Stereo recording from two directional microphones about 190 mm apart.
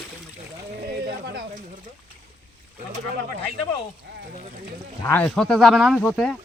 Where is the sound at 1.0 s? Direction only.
55° right (ahead or behind).